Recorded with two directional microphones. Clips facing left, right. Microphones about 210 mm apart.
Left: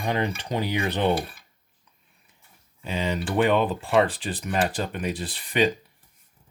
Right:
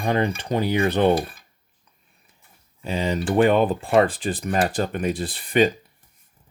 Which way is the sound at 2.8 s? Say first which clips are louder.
Right 4 dB; 40° right (ahead or behind).